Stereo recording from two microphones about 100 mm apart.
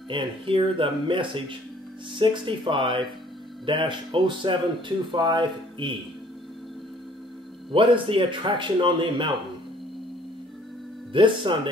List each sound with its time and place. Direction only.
0.1 s a man's voice: 60° right (ahead or behind)
7.7 s a man's voice: 60° right (ahead or behind)
11.1 s a man's voice: 55° right (ahead or behind)